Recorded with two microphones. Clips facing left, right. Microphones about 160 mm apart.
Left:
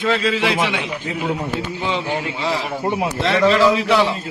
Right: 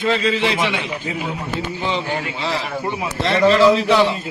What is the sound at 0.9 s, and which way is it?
Speech, 10° right (ahead or behind).